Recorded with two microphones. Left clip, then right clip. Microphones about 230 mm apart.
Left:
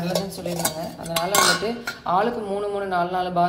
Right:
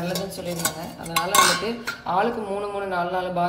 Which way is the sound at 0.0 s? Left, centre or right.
Centre.